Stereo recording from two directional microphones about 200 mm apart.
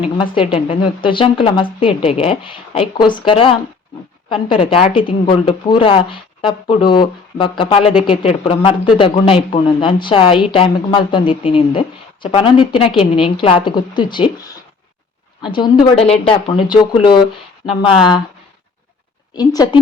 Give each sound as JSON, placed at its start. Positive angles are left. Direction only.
{"t": 0.0, "sound": "a woman's voice", "side_deg": 25}
{"t": 15.4, "sound": "a woman's voice", "side_deg": 25}
{"t": 19.3, "sound": "a woman's voice", "side_deg": 20}